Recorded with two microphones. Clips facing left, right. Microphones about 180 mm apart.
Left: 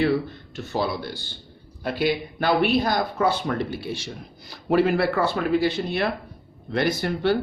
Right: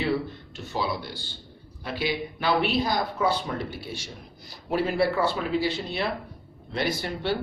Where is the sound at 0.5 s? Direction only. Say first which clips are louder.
Left 4 dB; 55° left (ahead or behind).